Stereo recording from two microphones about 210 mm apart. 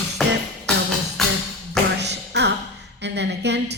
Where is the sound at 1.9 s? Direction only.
55° right (ahead or behind).